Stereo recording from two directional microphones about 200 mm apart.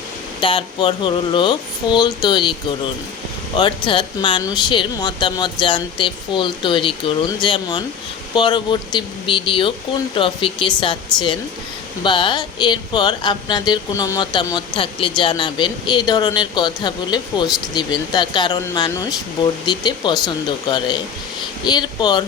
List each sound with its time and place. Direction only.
0.4 s speech: 25° left (ahead or behind)